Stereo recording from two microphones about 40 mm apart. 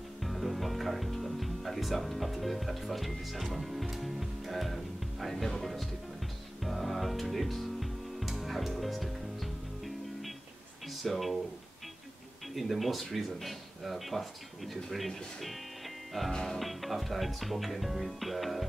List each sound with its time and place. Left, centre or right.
0.2 s music: centre
3.9 s speech: centre
5.5 s music: centre
10.9 s speech: centre
12.5 s speech: centre